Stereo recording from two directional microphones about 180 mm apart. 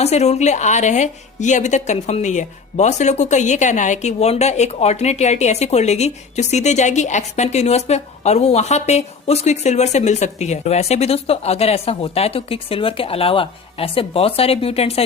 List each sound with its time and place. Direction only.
0.0 s a woman's voice: 35° left (ahead or behind)